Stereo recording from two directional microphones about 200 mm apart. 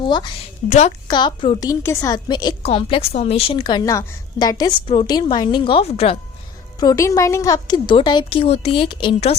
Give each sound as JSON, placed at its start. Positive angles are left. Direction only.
{"t": 0.0, "sound": "a woman's voice", "side_deg": 25}
{"t": 0.7, "sound": "a woman's voice", "side_deg": 35}
{"t": 1.0, "sound": "a woman's voice", "side_deg": 25}
{"t": 6.7, "sound": "a woman's voice", "side_deg": 15}